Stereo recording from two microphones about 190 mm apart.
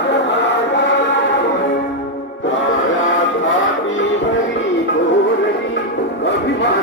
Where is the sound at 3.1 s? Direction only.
85° left.